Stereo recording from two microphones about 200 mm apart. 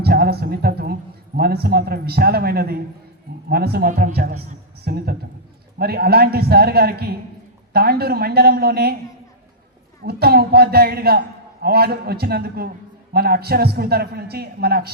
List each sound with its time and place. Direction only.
0.0 s a man's voice: 50° right (ahead or behind)
10.0 s a man's voice: 50° right (ahead or behind)